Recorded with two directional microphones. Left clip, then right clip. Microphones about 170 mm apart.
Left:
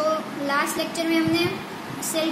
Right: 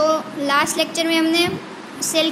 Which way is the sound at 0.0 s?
45° right (ahead or behind).